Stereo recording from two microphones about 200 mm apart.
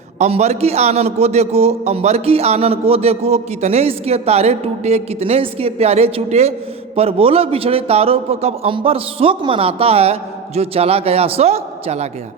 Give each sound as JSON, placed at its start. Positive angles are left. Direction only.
{"t": 0.2, "sound": "a man's voice", "side_deg": -35}